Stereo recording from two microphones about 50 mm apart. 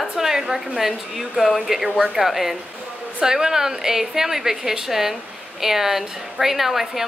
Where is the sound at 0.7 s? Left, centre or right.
Centre.